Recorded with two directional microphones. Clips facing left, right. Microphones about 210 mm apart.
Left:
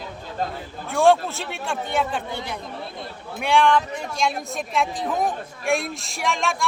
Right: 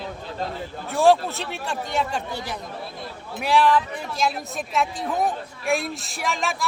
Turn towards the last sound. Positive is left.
turn(degrees=0)  # may be behind; listen again after turning